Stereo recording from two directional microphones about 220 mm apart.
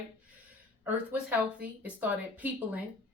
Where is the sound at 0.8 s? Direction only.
5° right (ahead or behind).